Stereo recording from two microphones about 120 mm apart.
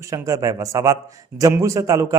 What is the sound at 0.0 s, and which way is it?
A man's voice, 25° right (ahead or behind).